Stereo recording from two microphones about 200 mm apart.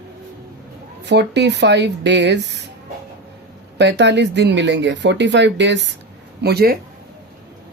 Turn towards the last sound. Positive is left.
turn(degrees=-50)  # may be behind; listen again after turning